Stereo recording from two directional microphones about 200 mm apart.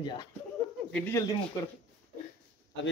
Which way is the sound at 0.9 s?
10° left (ahead or behind).